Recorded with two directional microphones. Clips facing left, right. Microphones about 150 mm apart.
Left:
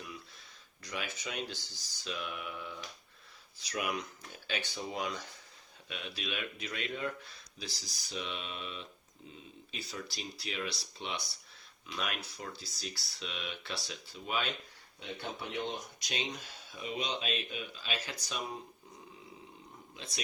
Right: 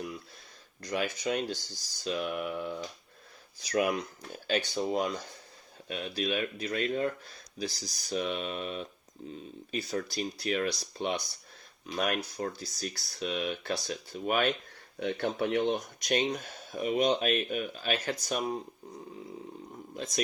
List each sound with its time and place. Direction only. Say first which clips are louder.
0.8 s speech: right 9 dB; 45° right (ahead or behind)
14.9 s speech: right 11 dB; 65° right (ahead or behind); by 18.4 s 50° right (ahead or behind)
19.9 s speech: right 11 dB; 45° right (ahead or behind)